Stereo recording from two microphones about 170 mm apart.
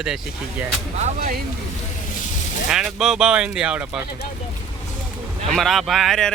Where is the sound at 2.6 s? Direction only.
5° right (ahead or behind).